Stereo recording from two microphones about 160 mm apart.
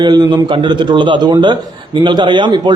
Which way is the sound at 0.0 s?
25° right (ahead or behind).